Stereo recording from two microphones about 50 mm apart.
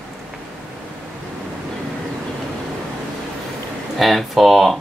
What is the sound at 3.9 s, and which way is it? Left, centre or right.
Speech, centre.